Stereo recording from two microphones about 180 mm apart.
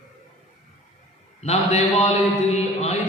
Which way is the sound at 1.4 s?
35° left (ahead or behind).